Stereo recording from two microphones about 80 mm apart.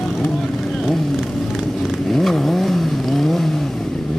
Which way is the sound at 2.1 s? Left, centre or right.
Centre.